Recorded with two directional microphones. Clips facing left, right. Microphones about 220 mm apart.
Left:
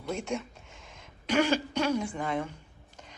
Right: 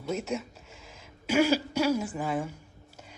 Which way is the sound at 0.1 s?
5° right (ahead or behind).